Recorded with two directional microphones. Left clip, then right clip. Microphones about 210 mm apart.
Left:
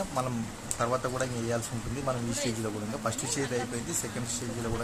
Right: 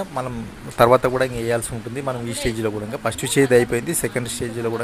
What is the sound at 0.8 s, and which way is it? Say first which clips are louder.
Speech: right 15 dB; 30° right (ahead or behind).